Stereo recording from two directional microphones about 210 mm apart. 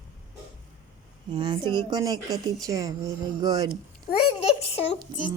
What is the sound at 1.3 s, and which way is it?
A woman's voice, 20° right (ahead or behind).